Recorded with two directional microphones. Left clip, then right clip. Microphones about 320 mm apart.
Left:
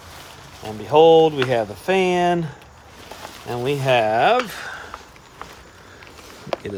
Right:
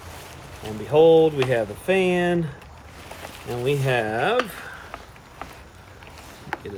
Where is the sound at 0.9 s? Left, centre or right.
Left.